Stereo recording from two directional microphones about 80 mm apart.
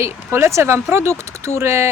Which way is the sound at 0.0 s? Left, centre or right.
Right.